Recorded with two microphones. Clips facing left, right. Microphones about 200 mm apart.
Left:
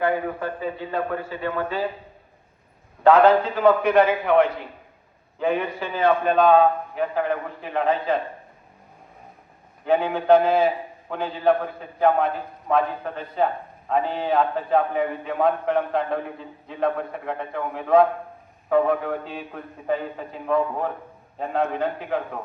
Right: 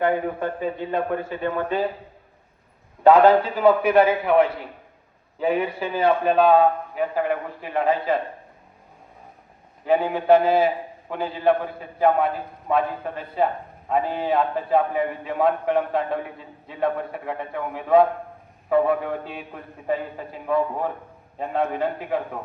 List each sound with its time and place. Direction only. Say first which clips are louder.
0.0 s speech: right 1 dB; 25° right (ahead or behind)
3.0 s a man's voice: right 1 dB; 10° right (ahead or behind)
9.8 s a man's voice: even; 5° right (ahead or behind)